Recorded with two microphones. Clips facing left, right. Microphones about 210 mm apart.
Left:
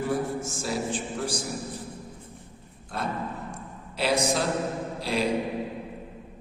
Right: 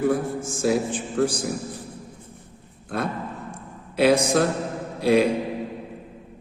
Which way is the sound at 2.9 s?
60° right (ahead or behind).